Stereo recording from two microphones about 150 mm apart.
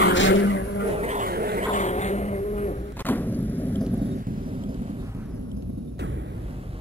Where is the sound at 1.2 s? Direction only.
90° right.